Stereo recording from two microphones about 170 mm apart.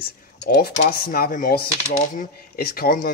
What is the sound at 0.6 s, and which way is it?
Speech, 65° left (ahead or behind).